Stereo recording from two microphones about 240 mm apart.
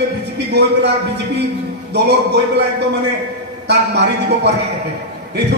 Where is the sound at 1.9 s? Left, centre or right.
Right.